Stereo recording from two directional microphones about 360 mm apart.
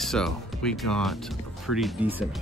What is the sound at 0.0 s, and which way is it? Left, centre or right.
Speech, centre.